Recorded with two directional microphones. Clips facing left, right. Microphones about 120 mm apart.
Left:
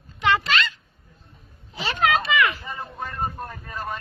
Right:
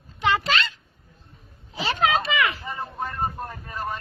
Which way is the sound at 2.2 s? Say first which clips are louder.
Left 2 dB; 30° right (ahead or behind).